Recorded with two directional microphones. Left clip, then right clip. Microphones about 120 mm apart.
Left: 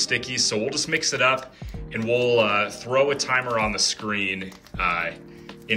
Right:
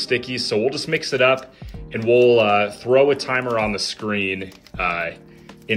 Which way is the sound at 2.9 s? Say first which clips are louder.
Right 5 dB; 20° right (ahead or behind).